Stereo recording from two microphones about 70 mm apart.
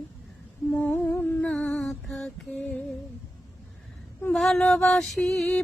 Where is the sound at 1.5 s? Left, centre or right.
Centre.